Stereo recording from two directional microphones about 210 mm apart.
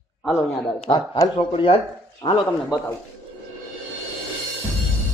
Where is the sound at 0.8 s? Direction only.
20° left (ahead or behind).